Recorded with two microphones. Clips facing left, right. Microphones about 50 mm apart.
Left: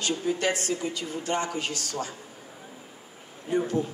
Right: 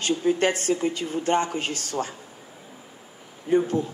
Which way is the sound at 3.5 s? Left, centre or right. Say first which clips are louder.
Right 5 dB; right.